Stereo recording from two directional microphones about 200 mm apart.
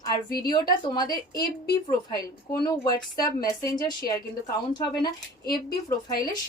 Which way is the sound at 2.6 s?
20° left (ahead or behind).